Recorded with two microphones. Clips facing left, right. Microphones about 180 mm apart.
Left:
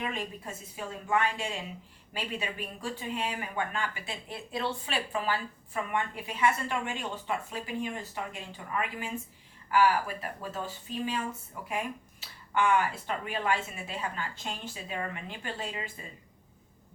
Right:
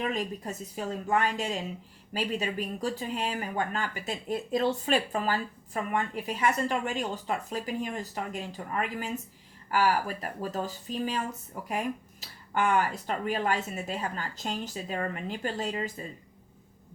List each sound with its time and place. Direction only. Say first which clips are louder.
0.0 s speech: right 4 dB; 40° right (ahead or behind)